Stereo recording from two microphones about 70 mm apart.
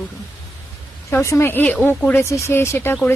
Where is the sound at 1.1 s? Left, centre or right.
Left.